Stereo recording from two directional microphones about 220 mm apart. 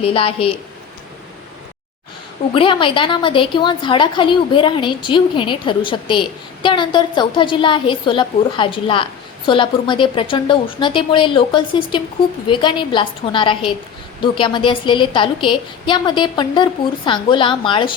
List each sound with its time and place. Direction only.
0.0 s a woman's voice: 25° left (ahead or behind)
2.6 s a woman's voice: 25° left (ahead or behind)